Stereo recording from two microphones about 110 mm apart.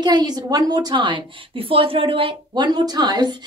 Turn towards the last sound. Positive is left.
turn(degrees=-40)  # may be behind; listen again after turning